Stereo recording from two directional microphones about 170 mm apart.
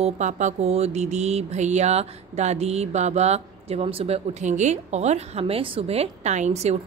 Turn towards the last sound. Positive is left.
turn(degrees=-40)  # may be behind; listen again after turning